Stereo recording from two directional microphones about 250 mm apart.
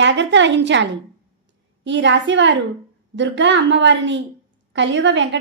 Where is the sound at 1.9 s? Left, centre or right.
Right.